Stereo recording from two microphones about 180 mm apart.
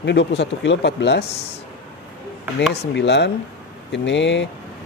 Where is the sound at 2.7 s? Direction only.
75° left (ahead or behind).